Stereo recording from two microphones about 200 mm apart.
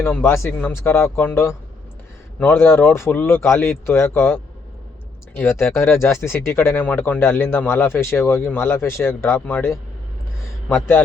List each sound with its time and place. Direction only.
0.0 s speech: 10° left (ahead or behind)
5.4 s speech: 10° left (ahead or behind)